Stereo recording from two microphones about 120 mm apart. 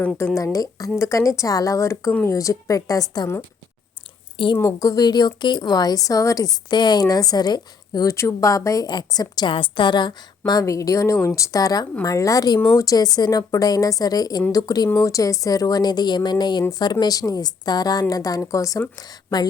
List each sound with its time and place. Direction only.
0.2 s a woman's voice: 25° left (ahead or behind)
4.5 s a woman's voice: 25° left (ahead or behind)
8.1 s a woman's voice: 25° left (ahead or behind)